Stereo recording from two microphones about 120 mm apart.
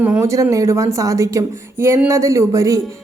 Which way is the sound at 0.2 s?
25° right (ahead or behind).